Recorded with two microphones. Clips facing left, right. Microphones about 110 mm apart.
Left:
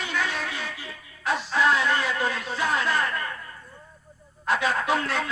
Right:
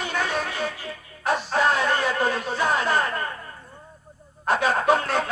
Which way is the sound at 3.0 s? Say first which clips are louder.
Right 2 dB; 30° right (ahead or behind).